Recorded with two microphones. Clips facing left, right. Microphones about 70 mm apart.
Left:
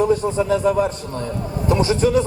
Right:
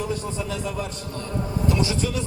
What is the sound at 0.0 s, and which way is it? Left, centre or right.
A man's voice, left.